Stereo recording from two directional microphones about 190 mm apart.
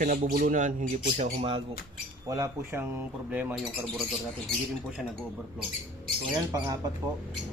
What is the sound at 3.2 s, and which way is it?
Speech, 5° right (ahead or behind).